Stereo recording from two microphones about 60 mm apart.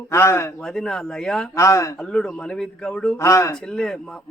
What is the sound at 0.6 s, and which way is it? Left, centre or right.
Speech, centre.